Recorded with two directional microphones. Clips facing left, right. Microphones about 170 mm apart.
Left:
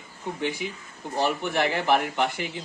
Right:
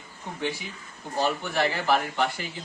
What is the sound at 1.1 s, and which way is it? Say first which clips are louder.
Speech: left 1 dB; 15° left (ahead or behind).